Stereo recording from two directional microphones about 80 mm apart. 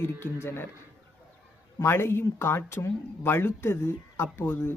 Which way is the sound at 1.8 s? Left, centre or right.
Left.